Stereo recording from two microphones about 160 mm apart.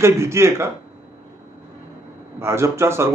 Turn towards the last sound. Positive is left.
turn(degrees=-15)  # may be behind; listen again after turning